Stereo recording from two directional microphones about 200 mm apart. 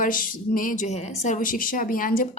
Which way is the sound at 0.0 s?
45° left (ahead or behind).